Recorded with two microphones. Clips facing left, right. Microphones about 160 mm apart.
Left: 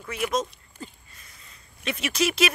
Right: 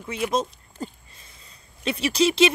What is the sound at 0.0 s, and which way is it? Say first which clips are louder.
Speech: right 2 dB; 30° right (ahead or behind).